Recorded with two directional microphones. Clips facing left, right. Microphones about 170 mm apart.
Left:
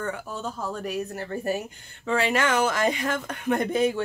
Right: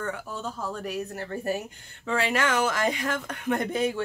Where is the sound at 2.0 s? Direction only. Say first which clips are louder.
Left 2 dB; 25° left (ahead or behind).